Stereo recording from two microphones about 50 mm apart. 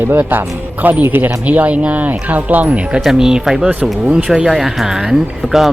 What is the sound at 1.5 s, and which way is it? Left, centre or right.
Speech, right.